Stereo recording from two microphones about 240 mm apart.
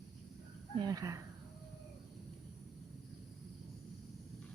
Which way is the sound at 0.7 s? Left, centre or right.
Centre.